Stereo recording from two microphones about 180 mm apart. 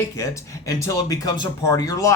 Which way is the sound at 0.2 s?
15° left (ahead or behind).